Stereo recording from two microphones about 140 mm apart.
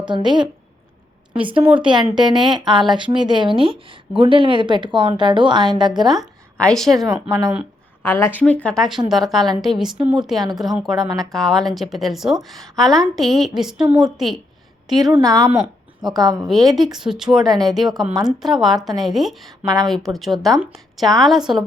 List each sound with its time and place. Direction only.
0.0 s a woman's voice: 35° right (ahead or behind)
1.5 s a woman's voice: 40° right (ahead or behind)
6.1 s a woman's voice: centre (ahead or behind)
7.1 s speech: 25° right (ahead or behind)
8.0 s a woman's voice: 20° left (ahead or behind); by 14.3 s centre (ahead or behind)
15.2 s speech: 25° right (ahead or behind)
16.7 s a woman's voice: centre (ahead or behind)
18.1 s speech: 25° right (ahead or behind)
18.3 s a woman's voice: centre (ahead or behind)
19.6 s speech: 25° right (ahead or behind)
19.9 s a woman's voice: centre (ahead or behind)